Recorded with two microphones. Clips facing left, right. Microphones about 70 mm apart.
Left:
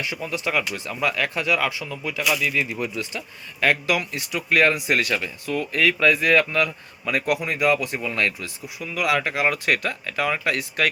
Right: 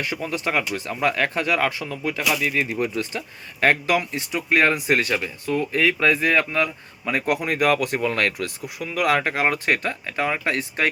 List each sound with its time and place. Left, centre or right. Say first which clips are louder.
0.0 s speech: right 1 dB; right
7.4 s speech: right 1 dB; right